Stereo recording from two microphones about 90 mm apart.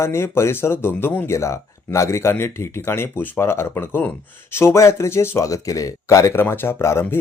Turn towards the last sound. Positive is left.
turn(degrees=30)  # may be behind; listen again after turning